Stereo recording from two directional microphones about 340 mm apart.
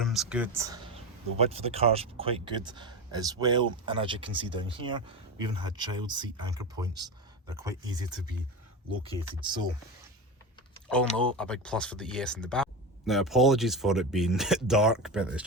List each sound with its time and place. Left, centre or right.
0.0 s speech: centre
9.4 s speech: centre
11.2 s speech: centre